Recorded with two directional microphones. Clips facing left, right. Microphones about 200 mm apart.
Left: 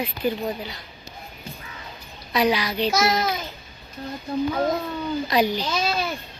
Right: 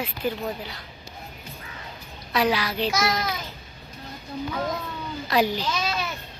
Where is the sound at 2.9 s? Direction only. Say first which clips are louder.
Left 5 dB; 25° left (ahead or behind).